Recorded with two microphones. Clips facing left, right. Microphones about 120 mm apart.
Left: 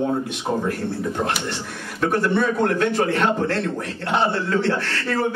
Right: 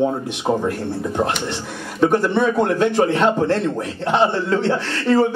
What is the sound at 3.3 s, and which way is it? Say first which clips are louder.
A man's voice: right 4 dB; 25° right (ahead or behind).